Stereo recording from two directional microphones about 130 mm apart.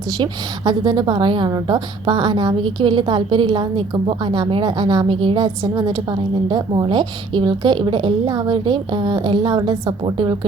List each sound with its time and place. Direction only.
0.2 s a woman's voice: 35° right (ahead or behind)